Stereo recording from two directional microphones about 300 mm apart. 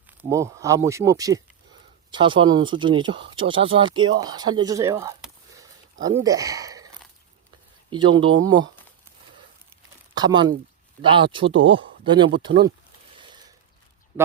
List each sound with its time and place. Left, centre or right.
0.2 s speech: centre
7.9 s speech: centre
10.2 s speech: centre
13.1 s ratchet: centre